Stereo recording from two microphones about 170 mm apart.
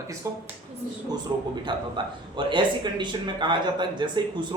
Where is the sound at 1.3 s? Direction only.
25° right (ahead or behind).